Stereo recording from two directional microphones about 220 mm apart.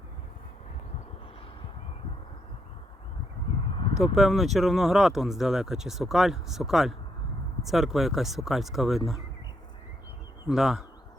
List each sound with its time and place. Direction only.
4.0 s speech: centre (ahead or behind)
10.5 s speech: centre (ahead or behind)